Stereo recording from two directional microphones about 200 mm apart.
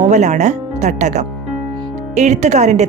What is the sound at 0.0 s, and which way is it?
A woman's voice, 35° right (ahead or behind).